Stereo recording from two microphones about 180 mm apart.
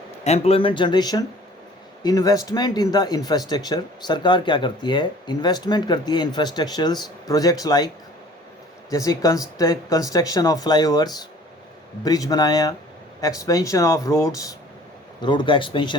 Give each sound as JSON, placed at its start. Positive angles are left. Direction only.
{"t": 0.3, "sound": "speech", "side_deg": 35}
{"t": 8.9, "sound": "speech", "side_deg": 20}